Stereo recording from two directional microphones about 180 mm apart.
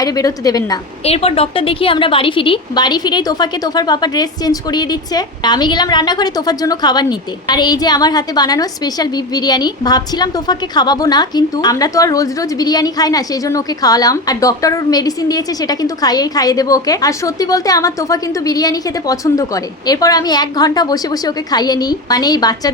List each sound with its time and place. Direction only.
0.0 s a woman's voice: 20° left (ahead or behind)
1.0 s a woman's voice: 35° left (ahead or behind)